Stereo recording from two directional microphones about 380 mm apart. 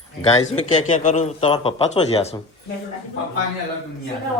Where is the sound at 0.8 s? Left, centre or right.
Centre.